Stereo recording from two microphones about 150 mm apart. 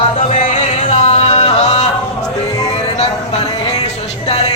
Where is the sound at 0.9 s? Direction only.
50° left (ahead or behind).